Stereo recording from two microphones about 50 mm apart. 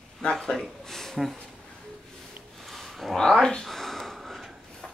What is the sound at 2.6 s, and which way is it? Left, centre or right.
Dog, centre.